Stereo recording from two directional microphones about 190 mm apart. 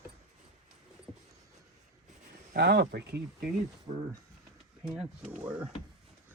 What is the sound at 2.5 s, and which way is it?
Speech, 60° right (ahead or behind).